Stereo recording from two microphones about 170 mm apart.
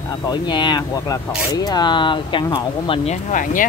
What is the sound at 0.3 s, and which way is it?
Speech, 25° left (ahead or behind).